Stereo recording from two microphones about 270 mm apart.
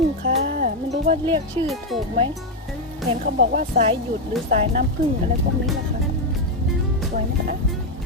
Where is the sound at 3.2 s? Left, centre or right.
Right.